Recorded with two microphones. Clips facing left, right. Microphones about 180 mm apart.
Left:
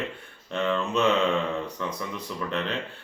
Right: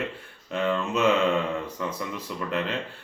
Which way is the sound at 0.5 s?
5° right (ahead or behind).